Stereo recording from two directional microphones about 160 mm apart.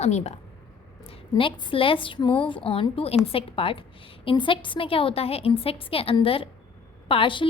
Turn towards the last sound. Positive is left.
turn(degrees=30)  # may be behind; listen again after turning